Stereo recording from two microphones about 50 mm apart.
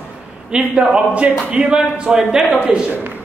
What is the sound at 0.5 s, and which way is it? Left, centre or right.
Speech, centre.